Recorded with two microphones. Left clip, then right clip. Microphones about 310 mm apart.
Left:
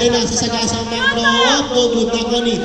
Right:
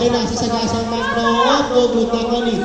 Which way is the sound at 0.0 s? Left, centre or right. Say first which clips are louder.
Left 2 dB; left.